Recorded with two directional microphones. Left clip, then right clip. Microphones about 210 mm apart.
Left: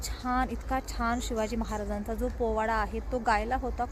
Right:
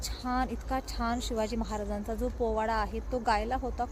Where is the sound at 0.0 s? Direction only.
Centre (ahead or behind).